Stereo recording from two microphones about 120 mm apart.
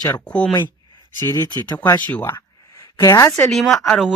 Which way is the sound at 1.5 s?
35° left (ahead or behind).